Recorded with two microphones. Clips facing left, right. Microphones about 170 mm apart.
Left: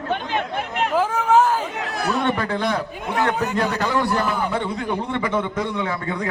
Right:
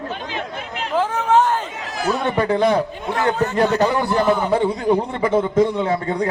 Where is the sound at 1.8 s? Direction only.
65° left (ahead or behind).